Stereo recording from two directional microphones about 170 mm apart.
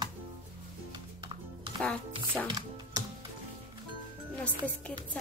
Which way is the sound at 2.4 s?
25° right (ahead or behind).